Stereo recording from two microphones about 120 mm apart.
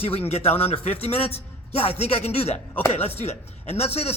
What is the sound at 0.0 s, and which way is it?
A man's voice, 55° left (ahead or behind).